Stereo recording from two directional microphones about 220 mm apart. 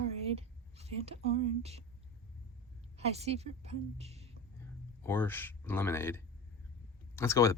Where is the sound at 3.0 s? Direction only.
30° right (ahead or behind).